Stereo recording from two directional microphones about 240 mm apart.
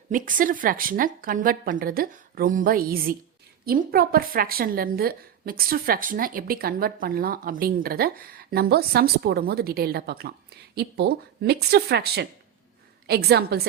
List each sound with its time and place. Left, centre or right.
0.1 s a woman's voice: right